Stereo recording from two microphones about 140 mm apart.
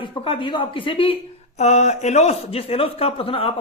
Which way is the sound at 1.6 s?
55° left (ahead or behind).